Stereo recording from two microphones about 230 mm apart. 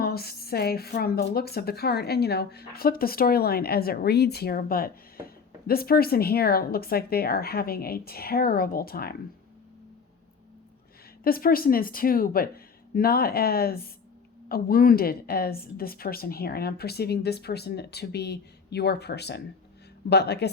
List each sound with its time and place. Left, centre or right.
0.0 s speech: left
11.2 s a woman's voice: left